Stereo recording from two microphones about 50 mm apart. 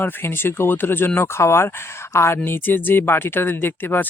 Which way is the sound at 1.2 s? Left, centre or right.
Left.